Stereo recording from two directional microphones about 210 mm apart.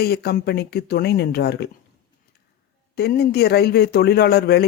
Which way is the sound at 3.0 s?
50° left (ahead or behind).